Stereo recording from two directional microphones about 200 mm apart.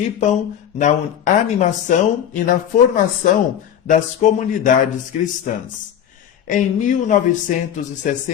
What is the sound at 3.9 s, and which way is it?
Speech, 40° left (ahead or behind).